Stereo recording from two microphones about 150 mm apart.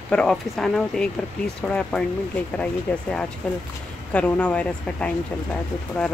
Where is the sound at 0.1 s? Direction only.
5° left (ahead or behind).